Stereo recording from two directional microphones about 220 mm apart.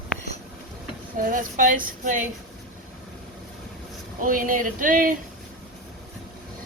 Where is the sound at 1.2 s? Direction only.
40° right (ahead or behind).